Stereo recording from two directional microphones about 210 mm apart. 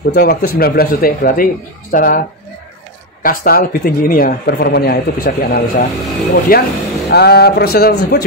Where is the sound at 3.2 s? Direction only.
45° left (ahead or behind).